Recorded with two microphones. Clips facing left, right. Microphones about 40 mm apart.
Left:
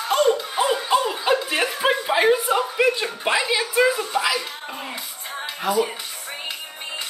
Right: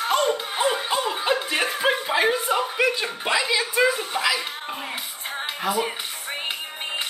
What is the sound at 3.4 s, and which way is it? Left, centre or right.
Speech, centre.